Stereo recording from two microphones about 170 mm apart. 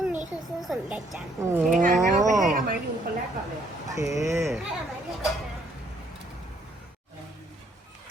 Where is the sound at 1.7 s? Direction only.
50° right (ahead or behind).